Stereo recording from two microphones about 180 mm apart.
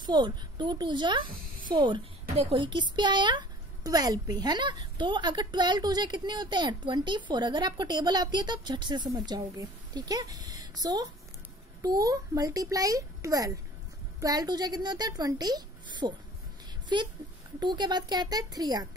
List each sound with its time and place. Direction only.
0.0 s a woman's voice: 25° right (ahead or behind)